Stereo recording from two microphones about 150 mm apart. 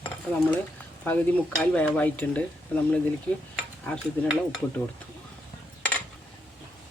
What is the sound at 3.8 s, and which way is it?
Speech, 5° left (ahead or behind).